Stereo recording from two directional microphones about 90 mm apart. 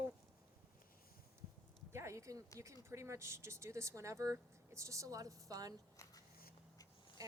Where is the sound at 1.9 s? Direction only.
35° right (ahead or behind).